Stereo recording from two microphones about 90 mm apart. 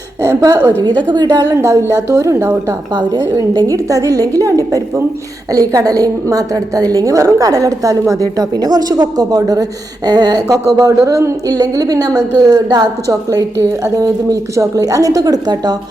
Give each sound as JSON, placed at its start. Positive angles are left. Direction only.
{"t": 0.2, "sound": "a woman's voice", "side_deg": -40}
{"t": 2.9, "sound": "a woman's voice", "side_deg": -55}
{"t": 3.7, "sound": "a woman's voice", "side_deg": -35}